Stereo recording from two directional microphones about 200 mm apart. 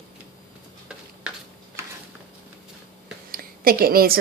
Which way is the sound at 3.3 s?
45° right (ahead or behind).